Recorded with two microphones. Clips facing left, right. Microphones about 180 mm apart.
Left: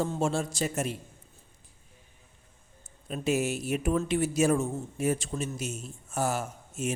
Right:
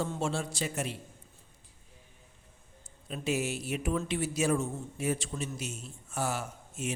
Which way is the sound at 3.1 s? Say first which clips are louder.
Left 4 dB; 45° left (ahead or behind).